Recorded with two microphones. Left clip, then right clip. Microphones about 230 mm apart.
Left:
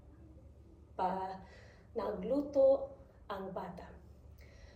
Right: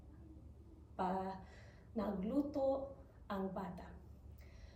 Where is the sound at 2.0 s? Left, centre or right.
Centre.